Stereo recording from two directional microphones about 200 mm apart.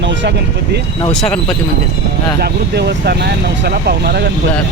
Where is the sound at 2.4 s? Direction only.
55° right (ahead or behind).